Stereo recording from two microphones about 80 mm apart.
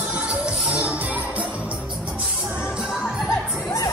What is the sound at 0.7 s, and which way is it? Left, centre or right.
Music, centre.